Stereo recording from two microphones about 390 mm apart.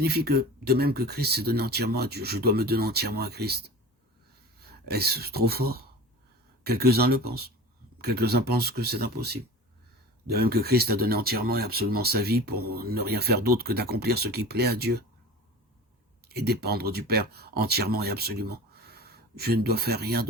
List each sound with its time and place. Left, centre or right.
0.0 s speech: right
4.6 s speech: right
16.3 s speech: right